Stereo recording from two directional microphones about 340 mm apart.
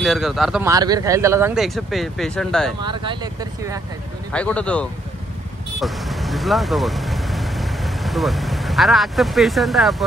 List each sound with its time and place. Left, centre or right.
0.0 s speech: centre
2.8 s speech: centre
4.3 s speech: centre